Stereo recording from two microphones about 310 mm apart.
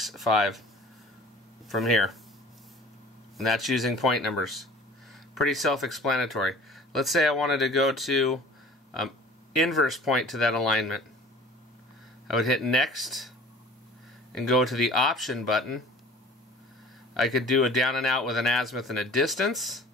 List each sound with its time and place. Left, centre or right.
0.0 s speech: centre
1.7 s speech: centre
3.3 s speech: centre
9.6 s speech: centre
12.3 s speech: centre
14.3 s speech: centre
17.1 s speech: centre